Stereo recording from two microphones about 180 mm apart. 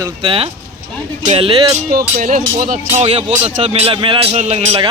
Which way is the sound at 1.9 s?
55° right (ahead or behind).